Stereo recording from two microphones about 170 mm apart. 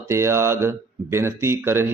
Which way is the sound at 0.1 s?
15° right (ahead or behind).